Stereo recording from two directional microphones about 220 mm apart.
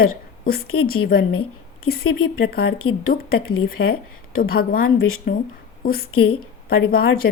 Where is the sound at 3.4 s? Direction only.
70° left (ahead or behind).